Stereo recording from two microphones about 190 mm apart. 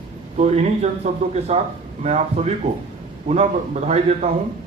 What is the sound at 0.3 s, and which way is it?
Speech, 35° right (ahead or behind).